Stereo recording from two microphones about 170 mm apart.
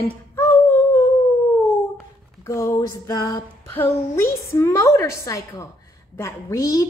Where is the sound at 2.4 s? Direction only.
20° left (ahead or behind).